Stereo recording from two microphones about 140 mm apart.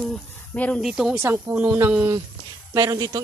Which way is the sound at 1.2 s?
20° right (ahead or behind).